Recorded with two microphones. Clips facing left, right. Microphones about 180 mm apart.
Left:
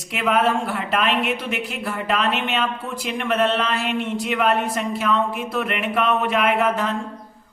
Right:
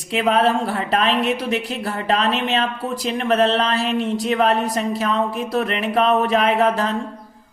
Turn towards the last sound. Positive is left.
turn(degrees=-35)  # may be behind; listen again after turning